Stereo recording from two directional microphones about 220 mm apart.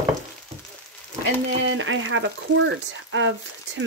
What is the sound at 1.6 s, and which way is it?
Speech, 60° right (ahead or behind).